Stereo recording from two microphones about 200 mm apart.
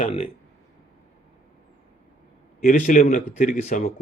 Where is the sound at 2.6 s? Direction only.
45° left (ahead or behind).